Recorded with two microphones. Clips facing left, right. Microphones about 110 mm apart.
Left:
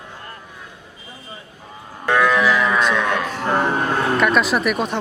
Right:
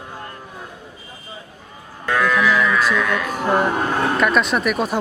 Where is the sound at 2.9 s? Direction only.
30° left (ahead or behind).